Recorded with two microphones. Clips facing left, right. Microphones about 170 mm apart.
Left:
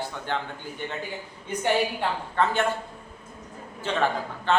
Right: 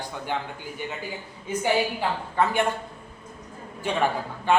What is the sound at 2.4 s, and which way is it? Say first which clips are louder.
Speech: right 1 dB; 10° right (ahead or behind).